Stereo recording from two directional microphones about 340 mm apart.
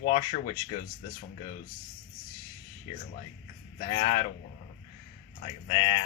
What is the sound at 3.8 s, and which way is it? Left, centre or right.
Speech, centre.